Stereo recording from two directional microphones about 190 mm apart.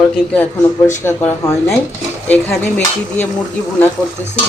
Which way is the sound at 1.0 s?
15° left (ahead or behind).